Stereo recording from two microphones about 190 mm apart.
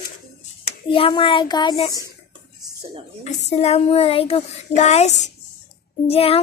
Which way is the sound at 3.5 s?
35° left (ahead or behind).